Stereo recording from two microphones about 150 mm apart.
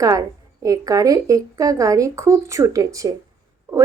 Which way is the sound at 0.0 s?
25° right (ahead or behind).